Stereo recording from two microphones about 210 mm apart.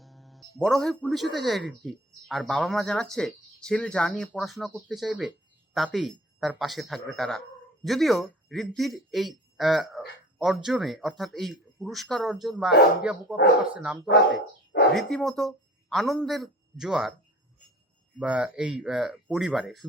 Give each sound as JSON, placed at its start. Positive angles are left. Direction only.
{"t": 0.0, "sound": "speech", "side_deg": 0}
{"t": 18.2, "sound": "speech", "side_deg": -5}